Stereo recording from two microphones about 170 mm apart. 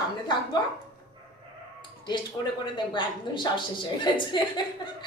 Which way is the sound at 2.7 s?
30° left (ahead or behind).